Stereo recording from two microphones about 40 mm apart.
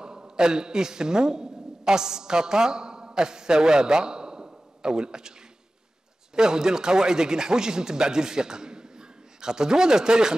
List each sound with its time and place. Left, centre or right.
0.0 s a man's voice: centre
6.3 s speech: centre